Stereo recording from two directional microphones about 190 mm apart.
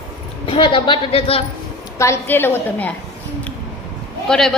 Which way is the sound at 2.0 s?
15° left (ahead or behind).